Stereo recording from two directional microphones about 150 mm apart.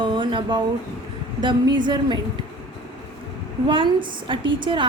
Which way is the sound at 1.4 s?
30° right (ahead or behind).